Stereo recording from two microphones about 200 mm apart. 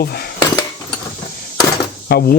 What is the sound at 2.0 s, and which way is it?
Speech, 50° left (ahead or behind).